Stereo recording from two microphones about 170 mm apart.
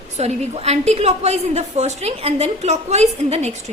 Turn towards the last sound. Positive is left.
turn(degrees=-40)  # may be behind; listen again after turning